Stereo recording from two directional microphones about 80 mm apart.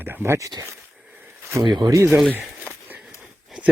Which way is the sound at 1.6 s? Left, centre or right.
Right.